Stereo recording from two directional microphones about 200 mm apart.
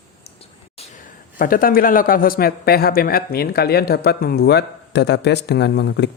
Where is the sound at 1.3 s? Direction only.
45° left (ahead or behind).